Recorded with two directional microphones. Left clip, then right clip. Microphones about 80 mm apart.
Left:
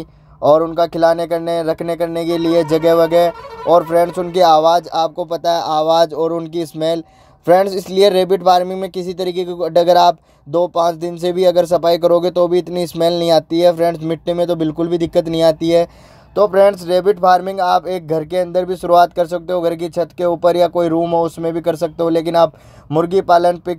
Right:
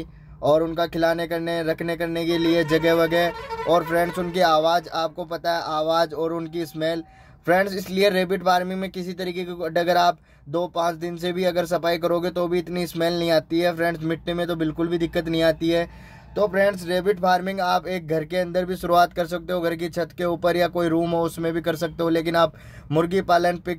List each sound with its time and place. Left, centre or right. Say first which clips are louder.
0.4 s speech: left 8 dB; left
4.3 s speech: left 8 dB; left